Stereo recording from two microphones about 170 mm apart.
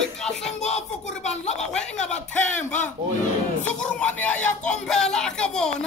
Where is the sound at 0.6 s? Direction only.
40° left (ahead or behind).